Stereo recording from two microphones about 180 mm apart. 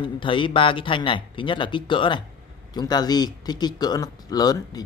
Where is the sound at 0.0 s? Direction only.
30° left (ahead or behind).